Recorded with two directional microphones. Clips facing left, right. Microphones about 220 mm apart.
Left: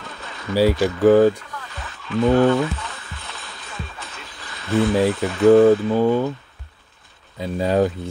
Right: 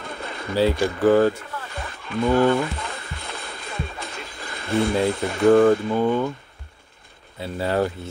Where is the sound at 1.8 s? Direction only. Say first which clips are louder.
Right 1 dB; 55° right (ahead or behind).